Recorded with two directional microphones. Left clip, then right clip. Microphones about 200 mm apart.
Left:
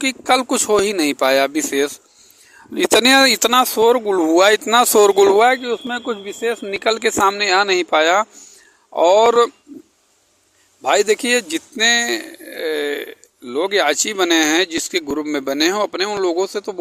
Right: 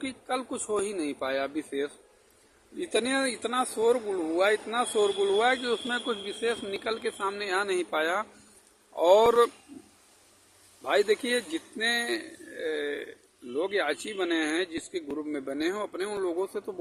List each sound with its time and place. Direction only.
0.0 s speech: 50° left (ahead or behind)
10.8 s speech: 45° left (ahead or behind)